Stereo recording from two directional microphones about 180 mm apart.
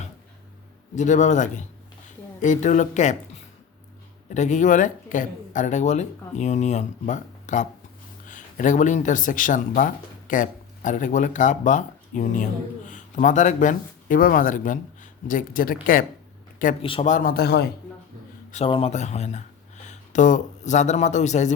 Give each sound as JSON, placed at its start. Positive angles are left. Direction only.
{"t": 0.9, "sound": "a woman's voice", "side_deg": 40}
{"t": 4.3, "sound": "speech", "side_deg": 40}
{"t": 16.8, "sound": "speech", "side_deg": 30}
{"t": 17.1, "sound": "speech", "side_deg": 50}
{"t": 18.5, "sound": "speech", "side_deg": 35}